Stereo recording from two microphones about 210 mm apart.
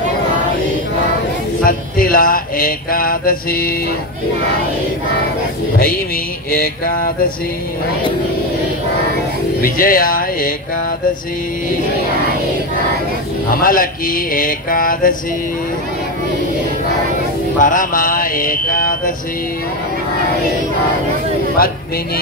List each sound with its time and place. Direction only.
1.6 s speech: 40° left (ahead or behind)
9.6 s mantra: 45° left (ahead or behind)
13.5 s speech: 40° left (ahead or behind)
17.6 s mantra: 40° left (ahead or behind)